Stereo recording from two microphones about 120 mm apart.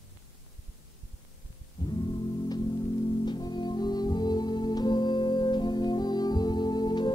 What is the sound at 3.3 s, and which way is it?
Music, 35° left (ahead or behind).